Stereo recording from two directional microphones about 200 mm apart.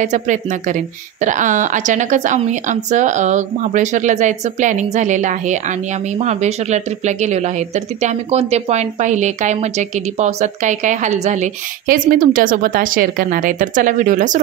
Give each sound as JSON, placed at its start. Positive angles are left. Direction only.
{"t": 0.0, "sound": "a woman's voice", "side_deg": -40}